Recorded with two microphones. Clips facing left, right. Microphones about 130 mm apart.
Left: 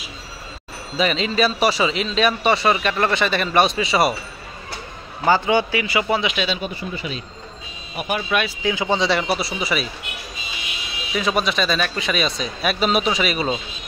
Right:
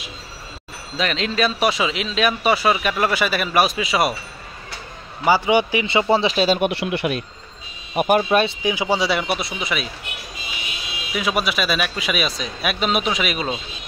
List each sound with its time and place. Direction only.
0.9 s speech: centre (ahead or behind)
5.2 s a man's voice: 10° right (ahead or behind); by 6.6 s 40° right (ahead or behind)
6.6 s speech: 75° right (ahead or behind)
7.9 s speech: 50° right (ahead or behind)
8.5 s speech: 15° right (ahead or behind); by 9.8 s 5° left (ahead or behind)
11.1 s speech: 5° right (ahead or behind)